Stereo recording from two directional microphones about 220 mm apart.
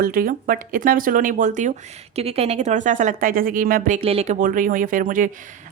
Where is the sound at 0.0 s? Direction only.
40° right (ahead or behind).